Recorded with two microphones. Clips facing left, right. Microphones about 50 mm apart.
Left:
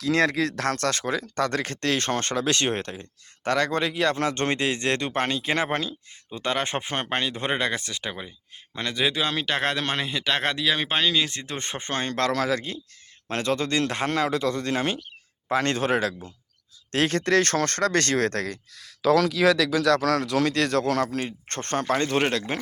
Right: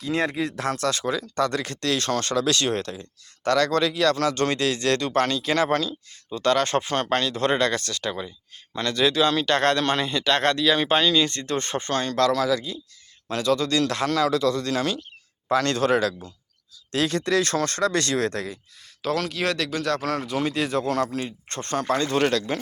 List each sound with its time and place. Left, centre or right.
0.0 s speech: left
16.9 s speech: left
20.1 s speech: left
22.2 s speech: left